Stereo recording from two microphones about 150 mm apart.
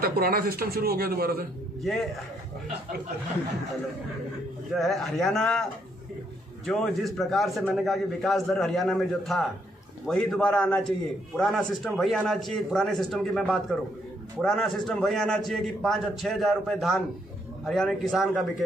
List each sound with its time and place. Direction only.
0.0 s a man's voice: 80° right
1.8 s a man's voice: centre (ahead or behind)
4.7 s a man's voice: centre (ahead or behind)